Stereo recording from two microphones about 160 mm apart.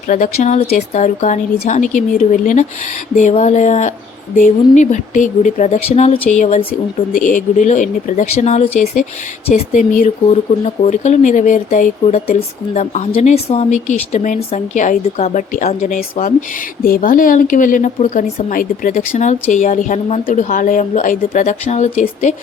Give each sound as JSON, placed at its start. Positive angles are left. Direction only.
{"t": 0.1, "sound": "speech", "side_deg": 55}
{"t": 7.2, "sound": "speech", "side_deg": 55}
{"t": 16.8, "sound": "a woman's voice", "side_deg": 60}